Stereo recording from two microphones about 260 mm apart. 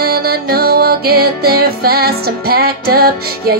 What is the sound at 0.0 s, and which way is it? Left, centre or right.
Music, right.